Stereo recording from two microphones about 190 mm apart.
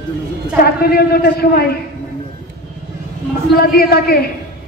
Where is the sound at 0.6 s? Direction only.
55° left (ahead or behind).